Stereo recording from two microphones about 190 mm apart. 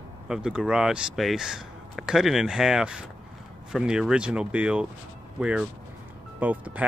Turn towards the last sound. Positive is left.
turn(degrees=-10)  # may be behind; listen again after turning